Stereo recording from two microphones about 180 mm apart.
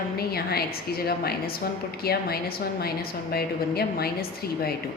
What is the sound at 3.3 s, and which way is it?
A woman's voice, 60° left (ahead or behind).